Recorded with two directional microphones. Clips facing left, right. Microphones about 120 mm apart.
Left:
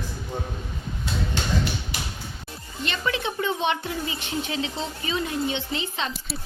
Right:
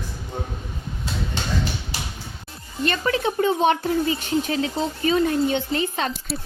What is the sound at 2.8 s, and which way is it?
A woman's voice, 40° right (ahead or behind).